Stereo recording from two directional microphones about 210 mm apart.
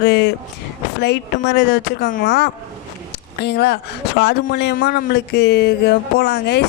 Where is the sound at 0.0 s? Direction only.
50° left (ahead or behind).